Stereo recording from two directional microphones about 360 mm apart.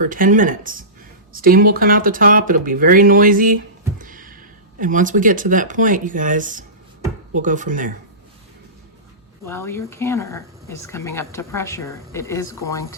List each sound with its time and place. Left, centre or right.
0.0 s speech: right
9.5 s speech: centre